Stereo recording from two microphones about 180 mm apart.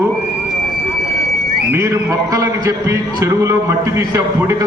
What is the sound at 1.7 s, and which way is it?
A man's voice, 15° right (ahead or behind).